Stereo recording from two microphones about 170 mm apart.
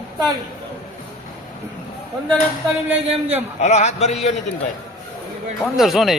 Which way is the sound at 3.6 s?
40° left (ahead or behind).